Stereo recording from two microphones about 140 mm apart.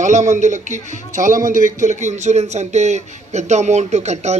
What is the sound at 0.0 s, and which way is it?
A man's voice, 60° right (ahead or behind).